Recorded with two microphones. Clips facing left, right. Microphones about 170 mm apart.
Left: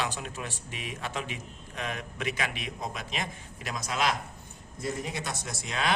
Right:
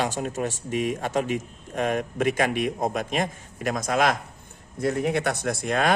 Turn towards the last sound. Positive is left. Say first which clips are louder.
# right 9 dB
turn(degrees=-50)  # may be behind; listen again after turning